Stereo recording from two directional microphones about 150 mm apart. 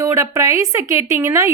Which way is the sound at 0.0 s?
20° right (ahead or behind).